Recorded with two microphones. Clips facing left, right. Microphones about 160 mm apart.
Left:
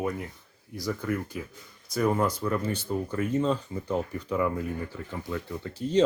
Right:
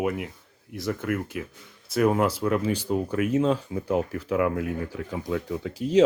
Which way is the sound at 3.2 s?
5° right (ahead or behind).